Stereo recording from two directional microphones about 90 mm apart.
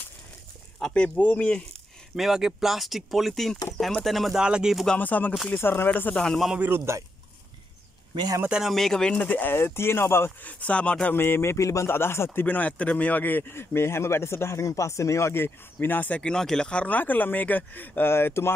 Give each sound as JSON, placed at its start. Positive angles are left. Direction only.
{"t": 0.7, "sound": "speech", "side_deg": 10}
{"t": 2.1, "sound": "speech", "side_deg": -5}
{"t": 4.8, "sound": "speech", "side_deg": 15}
{"t": 6.2, "sound": "speech", "side_deg": 5}
{"t": 6.7, "sound": "a man's voice", "side_deg": -25}
{"t": 8.5, "sound": "speech", "side_deg": -5}
{"t": 8.7, "sound": "speech", "side_deg": 5}
{"t": 9.2, "sound": "speech", "side_deg": 20}
{"t": 10.6, "sound": "speech", "side_deg": 15}
{"t": 11.1, "sound": "speech", "side_deg": 25}
{"t": 16.2, "sound": "speech", "side_deg": 5}